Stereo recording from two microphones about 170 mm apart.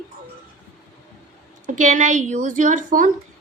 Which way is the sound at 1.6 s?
45° right (ahead or behind).